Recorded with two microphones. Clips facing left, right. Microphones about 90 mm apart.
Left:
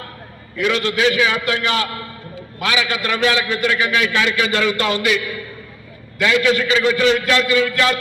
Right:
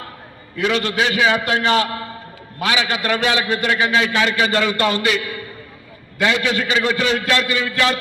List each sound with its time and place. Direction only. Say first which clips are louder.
0.5 s a man's voice: even; 30° right (ahead or behind)